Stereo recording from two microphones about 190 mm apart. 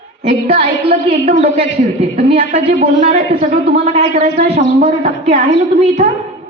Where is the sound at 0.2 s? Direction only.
35° right (ahead or behind).